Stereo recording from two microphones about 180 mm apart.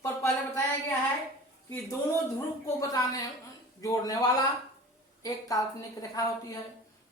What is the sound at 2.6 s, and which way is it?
A woman's voice, 20° left (ahead or behind).